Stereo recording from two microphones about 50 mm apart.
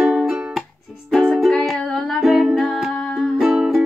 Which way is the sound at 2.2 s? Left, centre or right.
Centre.